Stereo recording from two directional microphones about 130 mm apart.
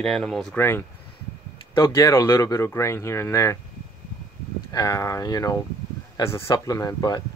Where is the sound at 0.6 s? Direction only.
15° left (ahead or behind).